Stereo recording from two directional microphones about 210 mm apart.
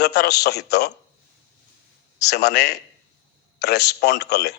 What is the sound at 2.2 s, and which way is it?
A man's voice, 50° left (ahead or behind).